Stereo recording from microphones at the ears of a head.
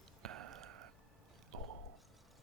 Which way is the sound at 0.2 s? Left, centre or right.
Right.